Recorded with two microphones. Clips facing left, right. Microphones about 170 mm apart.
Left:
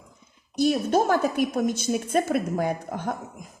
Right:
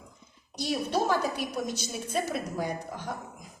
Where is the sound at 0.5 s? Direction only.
50° left (ahead or behind).